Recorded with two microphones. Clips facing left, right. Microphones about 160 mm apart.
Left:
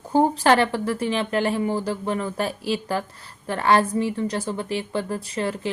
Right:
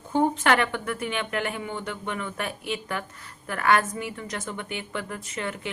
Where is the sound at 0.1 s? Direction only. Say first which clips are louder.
Left 4 dB; 35° left (ahead or behind).